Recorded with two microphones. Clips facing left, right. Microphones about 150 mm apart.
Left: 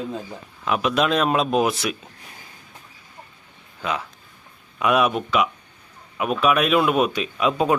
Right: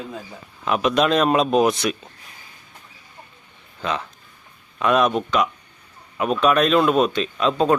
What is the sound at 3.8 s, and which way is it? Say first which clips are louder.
A man's voice: right 1 dB; 5° left (ahead or behind).